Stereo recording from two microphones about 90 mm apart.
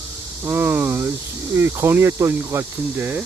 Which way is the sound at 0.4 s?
25° right (ahead or behind).